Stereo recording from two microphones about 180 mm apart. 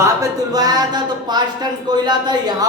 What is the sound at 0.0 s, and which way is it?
Speech, 20° right (ahead or behind).